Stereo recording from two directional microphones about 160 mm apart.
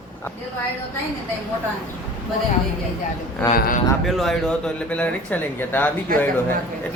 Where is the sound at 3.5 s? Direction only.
60° left (ahead or behind).